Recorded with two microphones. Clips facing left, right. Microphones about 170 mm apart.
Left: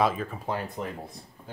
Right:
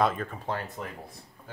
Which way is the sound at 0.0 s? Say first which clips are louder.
Left 1 dB; centre (ahead or behind).